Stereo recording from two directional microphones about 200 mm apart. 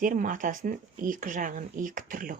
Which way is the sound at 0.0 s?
40° right (ahead or behind).